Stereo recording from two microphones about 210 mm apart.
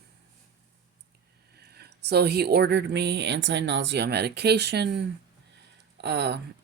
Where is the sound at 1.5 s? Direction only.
50° right (ahead or behind).